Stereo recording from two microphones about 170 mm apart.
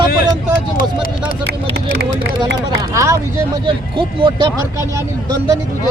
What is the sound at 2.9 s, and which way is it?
Speech, 15° right (ahead or behind).